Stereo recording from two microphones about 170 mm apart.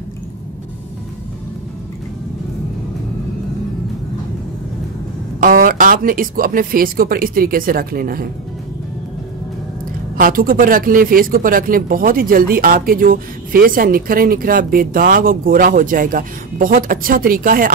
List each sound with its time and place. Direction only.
5.4 s speech: 55° right (ahead or behind)
10.1 s speech: 55° right (ahead or behind)